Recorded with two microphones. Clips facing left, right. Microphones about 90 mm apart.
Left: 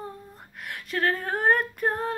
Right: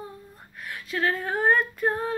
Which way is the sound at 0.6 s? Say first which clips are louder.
Even; 60° left (ahead or behind).